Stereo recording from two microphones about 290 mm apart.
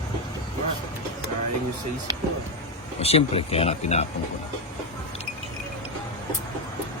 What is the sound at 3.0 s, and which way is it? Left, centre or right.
Speech, left.